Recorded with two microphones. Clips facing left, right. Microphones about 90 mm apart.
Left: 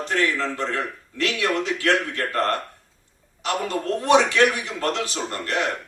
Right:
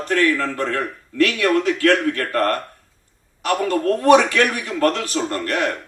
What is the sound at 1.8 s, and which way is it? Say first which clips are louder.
Speech: right 5 dB; 55° right (ahead or behind).